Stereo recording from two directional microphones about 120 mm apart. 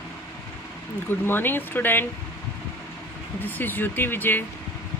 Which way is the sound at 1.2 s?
15° left (ahead or behind).